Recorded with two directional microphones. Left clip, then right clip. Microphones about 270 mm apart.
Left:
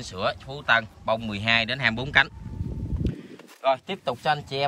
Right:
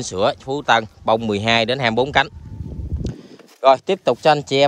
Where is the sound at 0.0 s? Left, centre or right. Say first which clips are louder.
Right 9 dB; right.